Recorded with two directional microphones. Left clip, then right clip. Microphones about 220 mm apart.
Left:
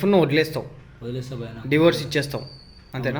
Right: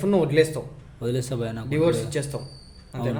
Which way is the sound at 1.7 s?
25° left (ahead or behind).